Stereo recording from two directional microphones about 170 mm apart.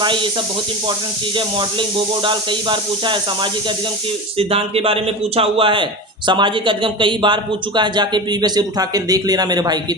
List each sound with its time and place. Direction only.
0.0 s speech: 30° right (ahead or behind)
2.2 s a man's voice: 30° right (ahead or behind)